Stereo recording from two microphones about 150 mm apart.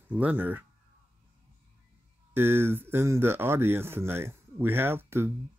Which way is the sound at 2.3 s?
15° right (ahead or behind).